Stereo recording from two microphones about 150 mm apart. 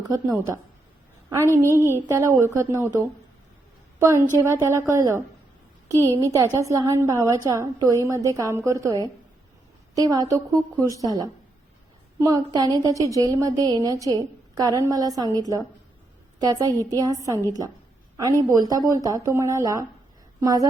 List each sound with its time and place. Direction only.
0.1 s a woman's voice: 20° right (ahead or behind)
1.8 s a woman's voice: 20° right (ahead or behind)
4.0 s a woman's voice: 20° right (ahead or behind)